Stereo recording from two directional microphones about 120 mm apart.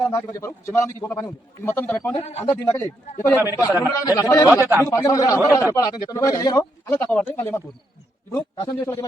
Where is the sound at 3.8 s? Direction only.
30° left (ahead or behind).